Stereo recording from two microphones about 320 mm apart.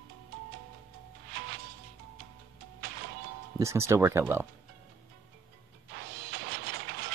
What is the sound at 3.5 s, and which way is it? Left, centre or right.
Speech, centre.